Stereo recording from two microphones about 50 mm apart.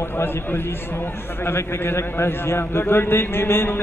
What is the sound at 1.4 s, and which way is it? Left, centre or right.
A man's voice, left.